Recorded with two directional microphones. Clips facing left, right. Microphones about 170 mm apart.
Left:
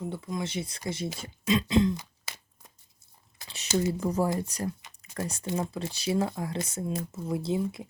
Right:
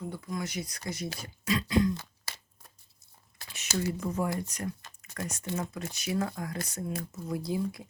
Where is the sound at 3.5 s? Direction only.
20° left (ahead or behind).